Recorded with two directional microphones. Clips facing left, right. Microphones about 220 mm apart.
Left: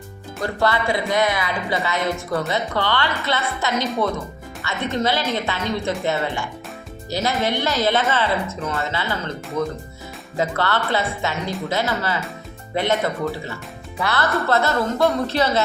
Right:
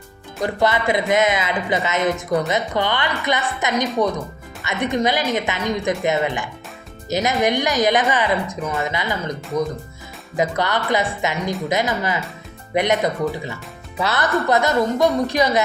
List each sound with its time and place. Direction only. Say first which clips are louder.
0.4 s speech: right 2 dB; 20° right (ahead or behind)